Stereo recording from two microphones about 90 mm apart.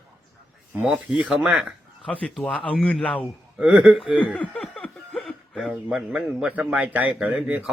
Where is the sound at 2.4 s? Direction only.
15° left (ahead or behind).